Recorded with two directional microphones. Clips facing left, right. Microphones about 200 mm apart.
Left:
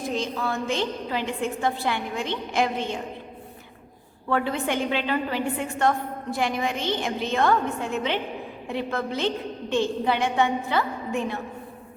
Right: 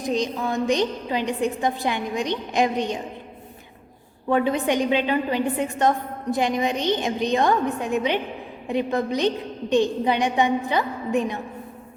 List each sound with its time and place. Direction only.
0.0 s a woman's voice: 15° right (ahead or behind)
4.3 s a woman's voice: 20° right (ahead or behind)